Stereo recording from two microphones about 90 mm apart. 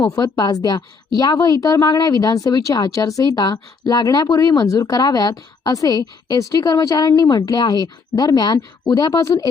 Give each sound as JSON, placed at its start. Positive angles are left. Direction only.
{"t": 0.0, "sound": "speech", "side_deg": 50}